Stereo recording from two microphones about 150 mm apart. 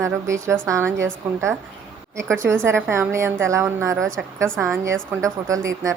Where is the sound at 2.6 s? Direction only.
15° right (ahead or behind).